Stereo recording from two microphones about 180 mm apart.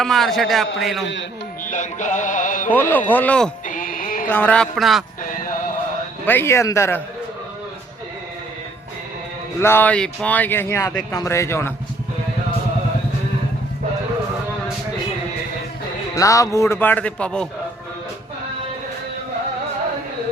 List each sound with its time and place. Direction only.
0.0 s speech: centre (ahead or behind)
1.6 s music: 45° left (ahead or behind)
3.1 s speech: 10° left (ahead or behind)
3.7 s music: 50° left (ahead or behind)
4.3 s speech: 10° left (ahead or behind)
5.2 s a sound: 45° left (ahead or behind)
6.2 s speech: 10° left (ahead or behind)
9.6 s speech: 15° left (ahead or behind)
16.1 s speech: 20° left (ahead or behind)